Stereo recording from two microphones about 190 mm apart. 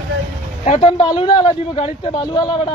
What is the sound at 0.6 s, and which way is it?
A man's voice, 30° left (ahead or behind).